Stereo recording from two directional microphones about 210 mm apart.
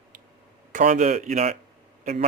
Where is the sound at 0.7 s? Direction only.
35° right (ahead or behind).